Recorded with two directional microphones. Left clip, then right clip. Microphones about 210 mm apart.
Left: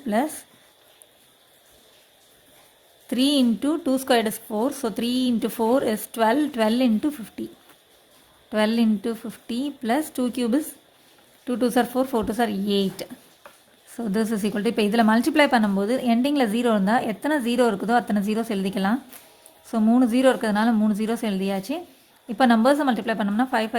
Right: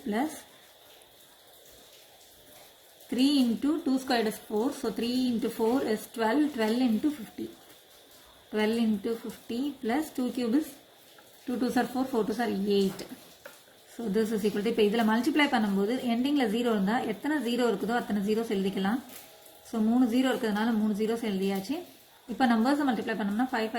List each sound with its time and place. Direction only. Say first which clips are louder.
3.1 s speech: left 5 dB; 50° left (ahead or behind)
8.5 s speech: left 6 dB; 50° left (ahead or behind)
14.1 s speech: left 2 dB; 55° left (ahead or behind)